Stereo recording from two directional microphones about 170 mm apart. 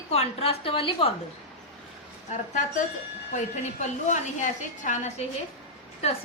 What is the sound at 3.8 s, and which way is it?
A woman's voice, 45° left (ahead or behind).